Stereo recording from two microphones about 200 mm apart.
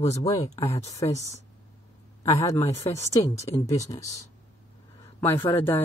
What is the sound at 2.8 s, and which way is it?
Speech, 15° left (ahead or behind).